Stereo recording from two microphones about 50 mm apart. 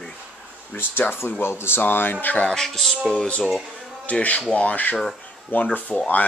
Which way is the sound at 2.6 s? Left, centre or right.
Centre.